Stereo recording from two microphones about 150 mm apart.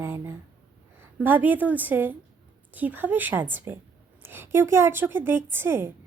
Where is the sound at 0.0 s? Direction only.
15° right (ahead or behind).